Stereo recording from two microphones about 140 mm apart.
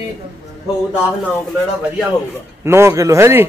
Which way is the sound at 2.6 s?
20° right (ahead or behind).